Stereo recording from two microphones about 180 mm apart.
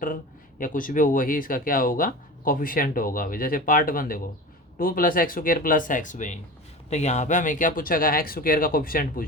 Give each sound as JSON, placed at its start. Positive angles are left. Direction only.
{"t": 0.6, "sound": "speech", "side_deg": 50}